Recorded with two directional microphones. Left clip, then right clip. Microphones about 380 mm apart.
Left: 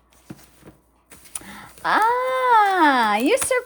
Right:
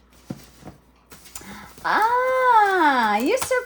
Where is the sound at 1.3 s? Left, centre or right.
Centre.